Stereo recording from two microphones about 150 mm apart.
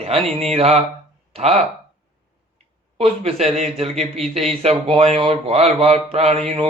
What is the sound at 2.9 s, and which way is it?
A man's voice, 40° right (ahead or behind).